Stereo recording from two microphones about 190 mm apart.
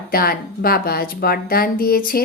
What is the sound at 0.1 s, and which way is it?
Speech, 50° left (ahead or behind).